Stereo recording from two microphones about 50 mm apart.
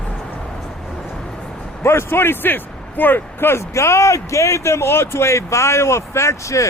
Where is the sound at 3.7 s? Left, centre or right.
Left.